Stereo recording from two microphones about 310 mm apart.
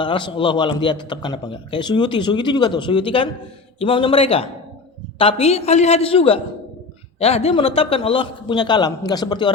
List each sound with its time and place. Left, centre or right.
0.0 s a man's voice: centre